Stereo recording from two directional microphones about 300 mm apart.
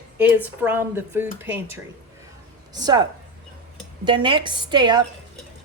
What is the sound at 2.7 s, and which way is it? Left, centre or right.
Speech, centre.